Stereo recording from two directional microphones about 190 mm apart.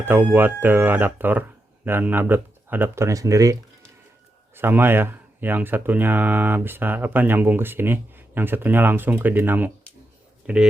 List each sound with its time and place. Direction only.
0.0 s speech: 10° right (ahead or behind)